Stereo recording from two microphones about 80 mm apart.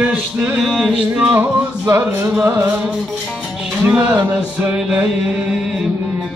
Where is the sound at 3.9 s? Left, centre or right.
Centre.